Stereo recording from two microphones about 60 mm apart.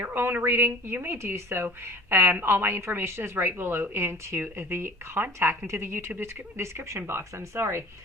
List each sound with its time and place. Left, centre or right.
0.0 s a woman's voice: right